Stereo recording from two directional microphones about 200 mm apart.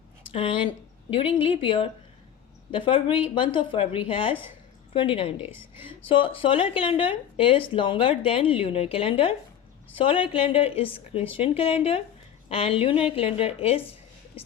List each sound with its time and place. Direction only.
1.1 s a woman's voice: 25° left (ahead or behind)